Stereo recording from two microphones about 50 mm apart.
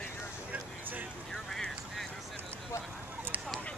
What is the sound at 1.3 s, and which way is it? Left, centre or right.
Vehicle, centre.